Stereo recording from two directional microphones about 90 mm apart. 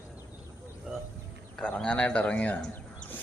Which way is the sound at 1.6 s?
10° left (ahead or behind).